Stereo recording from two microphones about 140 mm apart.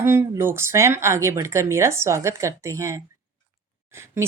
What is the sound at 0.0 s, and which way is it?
Speech, 15° right (ahead or behind).